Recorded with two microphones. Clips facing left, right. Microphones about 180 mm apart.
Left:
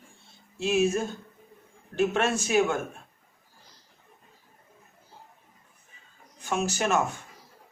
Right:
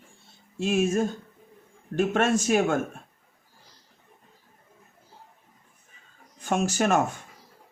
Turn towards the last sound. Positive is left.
turn(degrees=-50)  # may be behind; listen again after turning